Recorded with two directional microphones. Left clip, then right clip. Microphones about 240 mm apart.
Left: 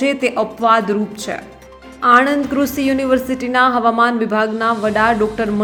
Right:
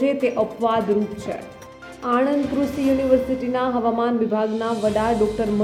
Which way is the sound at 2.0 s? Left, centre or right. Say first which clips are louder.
Left 8 dB; centre.